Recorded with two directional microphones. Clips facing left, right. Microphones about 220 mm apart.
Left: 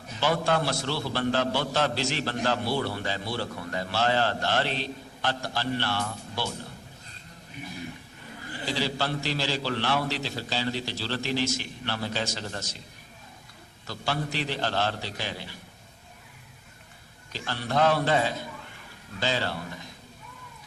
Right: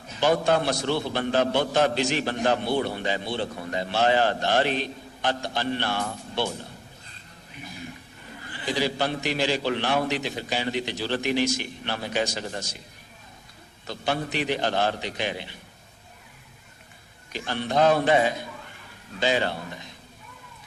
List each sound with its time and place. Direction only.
0.2 s a man's voice: 20° right (ahead or behind)
8.6 s a man's voice: 15° right (ahead or behind)
13.8 s a man's voice: 20° right (ahead or behind)
17.3 s a man's voice: 20° right (ahead or behind)